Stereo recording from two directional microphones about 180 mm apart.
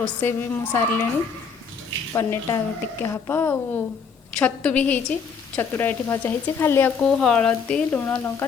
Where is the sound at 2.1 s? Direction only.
15° left (ahead or behind).